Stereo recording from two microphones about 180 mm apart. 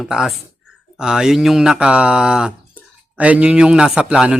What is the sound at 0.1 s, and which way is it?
A man's voice, centre (ahead or behind).